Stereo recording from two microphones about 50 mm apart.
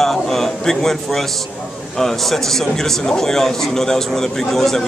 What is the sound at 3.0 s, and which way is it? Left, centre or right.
Speech, centre.